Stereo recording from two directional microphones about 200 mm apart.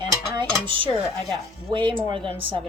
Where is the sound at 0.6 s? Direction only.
25° right (ahead or behind).